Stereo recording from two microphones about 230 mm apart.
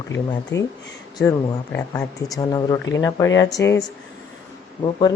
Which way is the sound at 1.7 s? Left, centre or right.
Centre.